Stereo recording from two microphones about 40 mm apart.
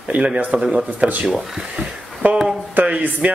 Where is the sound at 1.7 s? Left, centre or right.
Right.